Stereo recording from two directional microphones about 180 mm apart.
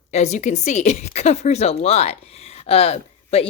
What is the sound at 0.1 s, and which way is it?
A woman's voice, 40° left (ahead or behind).